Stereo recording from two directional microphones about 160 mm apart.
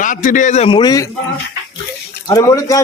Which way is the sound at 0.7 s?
25° left (ahead or behind).